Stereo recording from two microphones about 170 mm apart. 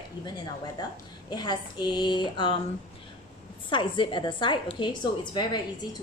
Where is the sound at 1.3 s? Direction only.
25° left (ahead or behind).